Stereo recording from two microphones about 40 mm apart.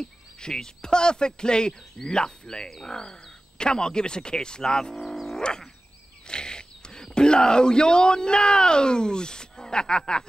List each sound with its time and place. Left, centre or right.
0.0 s speech: centre